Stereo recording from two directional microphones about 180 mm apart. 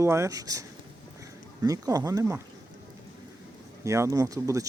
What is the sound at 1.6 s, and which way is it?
Speech, 20° right (ahead or behind).